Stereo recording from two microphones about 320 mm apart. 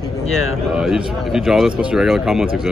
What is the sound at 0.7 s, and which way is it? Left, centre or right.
Speech, centre.